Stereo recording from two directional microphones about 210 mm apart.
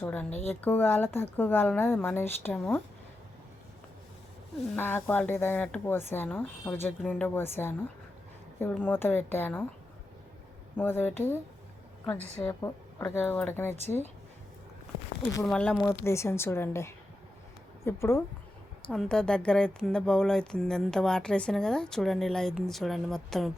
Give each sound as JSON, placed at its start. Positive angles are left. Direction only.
{"t": 0.0, "sound": "speech", "side_deg": 10}
{"t": 4.8, "sound": "speech", "side_deg": 10}
{"t": 10.8, "sound": "speech", "side_deg": 10}
{"t": 12.4, "sound": "speech", "side_deg": 15}
{"t": 15.4, "sound": "speech", "side_deg": 5}
{"t": 15.8, "sound": "speech", "side_deg": 15}